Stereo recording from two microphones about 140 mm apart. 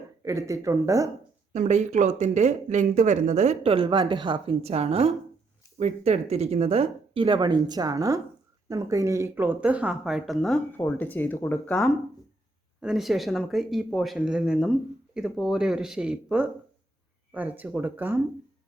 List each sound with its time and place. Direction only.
0.2 s speech: 20° right (ahead or behind)
1.5 s speech: 55° right (ahead or behind); by 10.6 s centre (ahead or behind)
10.7 s speech: 15° left (ahead or behind)
12.8 s speech: centre (ahead or behind)